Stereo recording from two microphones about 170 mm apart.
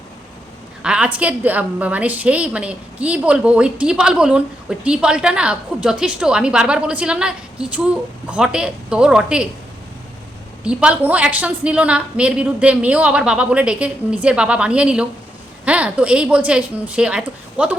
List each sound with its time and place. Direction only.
0.8 s a woman's voice: 5° right (ahead or behind)
10.6 s a woman's voice: 5° right (ahead or behind)